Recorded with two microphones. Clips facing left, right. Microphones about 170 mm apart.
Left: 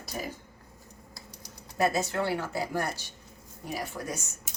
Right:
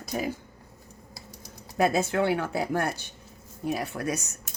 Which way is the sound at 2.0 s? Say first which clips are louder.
Right 5 dB; 60° right (ahead or behind).